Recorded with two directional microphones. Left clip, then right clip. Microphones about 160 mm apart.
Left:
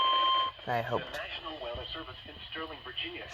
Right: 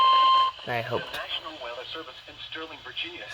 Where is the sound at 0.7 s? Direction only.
30° right (ahead or behind).